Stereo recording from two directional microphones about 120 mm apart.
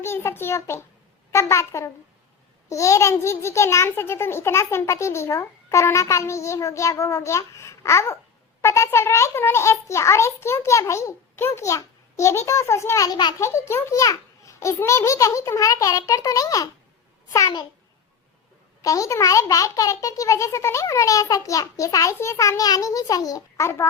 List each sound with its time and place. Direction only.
0.0 s a child's voice: 20° left (ahead or behind)
13.4 s a child's voice: 20° left (ahead or behind)
18.8 s a child's voice: 30° left (ahead or behind)